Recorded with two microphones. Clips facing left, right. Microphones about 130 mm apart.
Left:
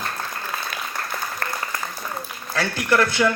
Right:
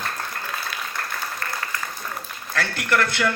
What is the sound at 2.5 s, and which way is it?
Speech, 15° left (ahead or behind).